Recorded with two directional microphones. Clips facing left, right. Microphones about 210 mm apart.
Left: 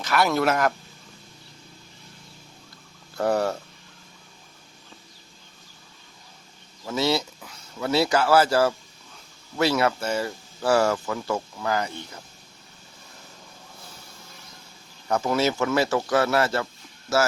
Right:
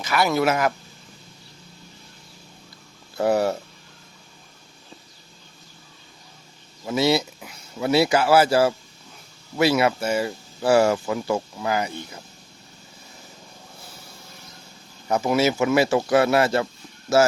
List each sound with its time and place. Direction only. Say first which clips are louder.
0.0 s speech: right 1 dB; centre (ahead or behind)
3.2 s speech: right 3 dB; 10° right (ahead or behind)
6.8 s speech: right 4 dB; 10° right (ahead or behind)
15.0 s speech: right 3 dB; 10° right (ahead or behind)